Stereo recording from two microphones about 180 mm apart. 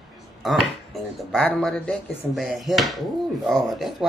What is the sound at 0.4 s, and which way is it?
Speech, centre (ahead or behind).